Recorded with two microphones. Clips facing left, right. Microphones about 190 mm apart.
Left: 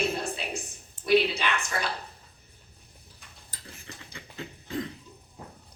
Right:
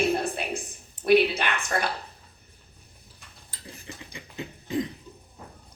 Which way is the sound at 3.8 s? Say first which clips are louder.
Right 3 dB; 15° right (ahead or behind).